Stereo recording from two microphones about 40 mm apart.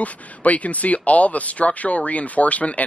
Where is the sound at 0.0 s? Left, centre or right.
Left.